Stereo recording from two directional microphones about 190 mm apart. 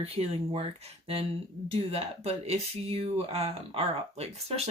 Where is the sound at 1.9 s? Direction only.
35° right (ahead or behind).